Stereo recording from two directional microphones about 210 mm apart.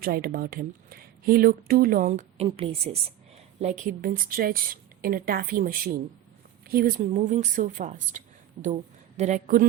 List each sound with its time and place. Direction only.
0.0 s a woman's voice: 45° right (ahead or behind)